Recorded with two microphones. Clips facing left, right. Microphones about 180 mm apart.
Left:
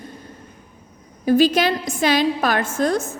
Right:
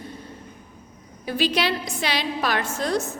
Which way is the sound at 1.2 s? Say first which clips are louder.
Left 8 dB; 45° left (ahead or behind).